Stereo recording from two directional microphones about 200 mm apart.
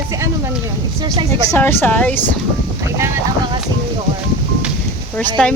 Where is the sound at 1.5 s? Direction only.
10° left (ahead or behind).